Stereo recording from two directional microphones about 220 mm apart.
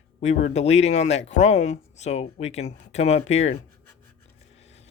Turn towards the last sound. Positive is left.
turn(degrees=30)  # may be behind; listen again after turning